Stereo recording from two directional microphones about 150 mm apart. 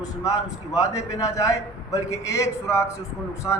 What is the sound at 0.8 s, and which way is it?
A man's voice, 25° left (ahead or behind).